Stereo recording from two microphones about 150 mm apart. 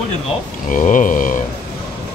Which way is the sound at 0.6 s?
60° left (ahead or behind).